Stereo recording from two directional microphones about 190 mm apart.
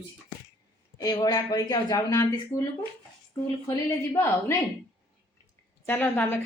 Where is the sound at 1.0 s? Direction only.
20° left (ahead or behind).